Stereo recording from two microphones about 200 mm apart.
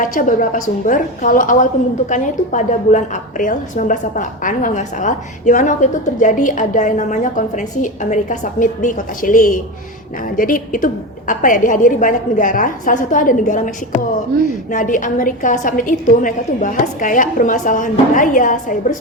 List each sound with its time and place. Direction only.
0.0 s a woman's voice: 40° left (ahead or behind)